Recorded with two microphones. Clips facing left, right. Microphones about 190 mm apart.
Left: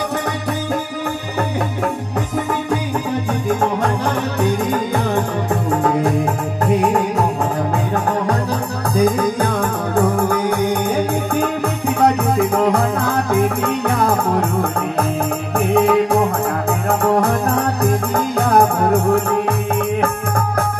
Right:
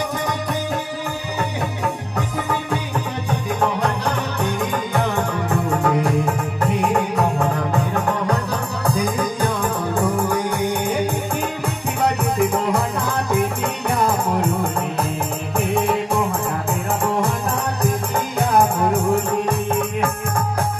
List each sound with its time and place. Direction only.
15.7 s music: 60° left (ahead or behind)